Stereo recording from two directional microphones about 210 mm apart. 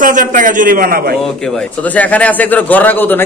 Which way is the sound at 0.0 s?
40° right (ahead or behind).